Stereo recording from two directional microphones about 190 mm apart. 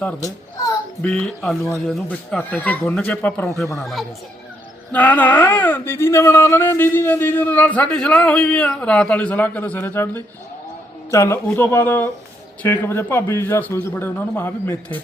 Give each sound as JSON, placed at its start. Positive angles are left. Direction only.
{"t": 0.0, "sound": "a child's voice", "side_deg": 20}
{"t": 1.0, "sound": "speech", "side_deg": 5}